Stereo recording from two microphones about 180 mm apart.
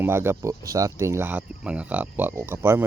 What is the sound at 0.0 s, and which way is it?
Speech, 10° right (ahead or behind).